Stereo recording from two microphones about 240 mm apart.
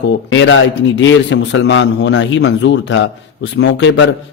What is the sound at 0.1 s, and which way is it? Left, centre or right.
A man's voice, left.